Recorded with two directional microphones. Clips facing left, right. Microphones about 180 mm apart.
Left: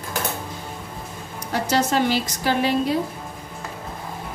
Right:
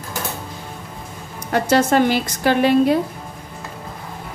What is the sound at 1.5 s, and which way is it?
A woman's voice, 55° right (ahead or behind).